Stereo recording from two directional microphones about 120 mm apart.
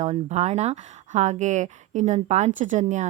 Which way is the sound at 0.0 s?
70° right (ahead or behind).